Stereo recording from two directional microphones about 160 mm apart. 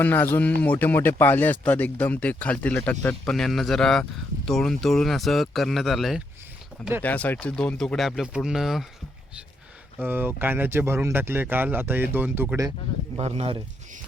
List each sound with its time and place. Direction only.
0.0 s speech: 10° left (ahead or behind)
7.0 s speech: 10° left (ahead or behind)
10.0 s speech: 10° right (ahead or behind)
13.1 s speech: 40° right (ahead or behind)